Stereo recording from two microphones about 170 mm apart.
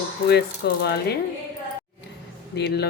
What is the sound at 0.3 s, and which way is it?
Speech, 75° left (ahead or behind).